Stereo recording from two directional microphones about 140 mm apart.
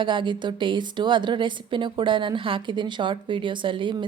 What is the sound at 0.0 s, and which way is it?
A woman's voice, 35° right (ahead or behind).